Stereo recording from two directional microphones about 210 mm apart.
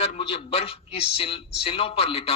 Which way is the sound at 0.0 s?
30° left (ahead or behind).